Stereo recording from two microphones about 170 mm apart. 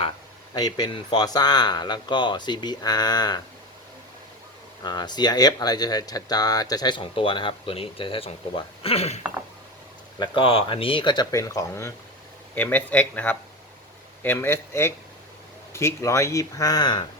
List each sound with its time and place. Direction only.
0.5 s speech: 25° left (ahead or behind)
4.8 s speech: 25° left (ahead or behind)